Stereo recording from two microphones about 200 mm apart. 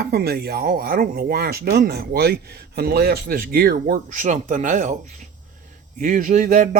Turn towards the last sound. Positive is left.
turn(degrees=-40)  # may be behind; listen again after turning